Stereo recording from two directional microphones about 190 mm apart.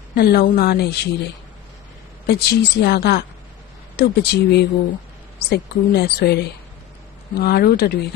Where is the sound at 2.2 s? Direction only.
60° left (ahead or behind).